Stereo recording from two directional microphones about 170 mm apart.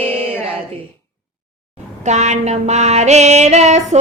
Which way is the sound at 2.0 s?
45° right (ahead or behind).